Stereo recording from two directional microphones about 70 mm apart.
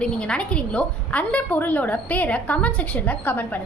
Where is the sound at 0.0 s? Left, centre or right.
Centre.